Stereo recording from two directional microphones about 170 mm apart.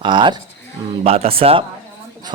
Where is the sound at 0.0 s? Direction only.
30° right (ahead or behind).